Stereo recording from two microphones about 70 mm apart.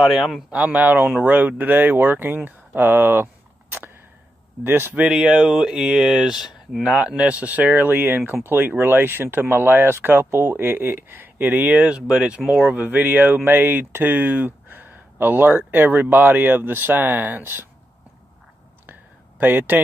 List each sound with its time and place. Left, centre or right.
0.0 s a man's voice: centre
0.5 s speech: right
4.6 s speech: right
5.0 s speech: centre
7.9 s speech: right; by 12.6 s centre
12.6 s speech: right
18.9 s a sound: right